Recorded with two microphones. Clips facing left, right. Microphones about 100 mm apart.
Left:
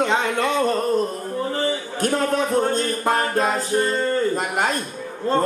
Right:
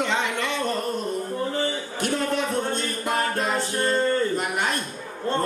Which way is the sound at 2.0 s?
40° left (ahead or behind).